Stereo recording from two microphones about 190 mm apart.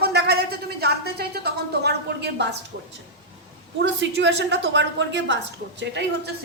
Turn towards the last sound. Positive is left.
turn(degrees=-70)  # may be behind; listen again after turning